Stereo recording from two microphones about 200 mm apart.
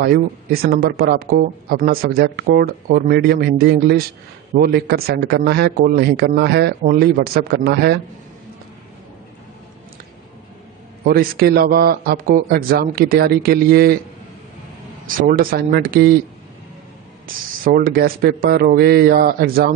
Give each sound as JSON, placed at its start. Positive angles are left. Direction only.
{"t": 0.0, "sound": "speech", "side_deg": -50}
{"t": 11.1, "sound": "speech", "side_deg": -50}
{"t": 15.0, "sound": "speech", "side_deg": -45}
{"t": 17.3, "sound": "speech", "side_deg": -45}